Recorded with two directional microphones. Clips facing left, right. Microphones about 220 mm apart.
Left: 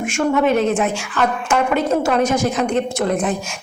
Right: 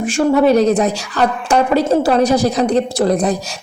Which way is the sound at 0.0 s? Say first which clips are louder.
Right 4 dB; 35° right (ahead or behind).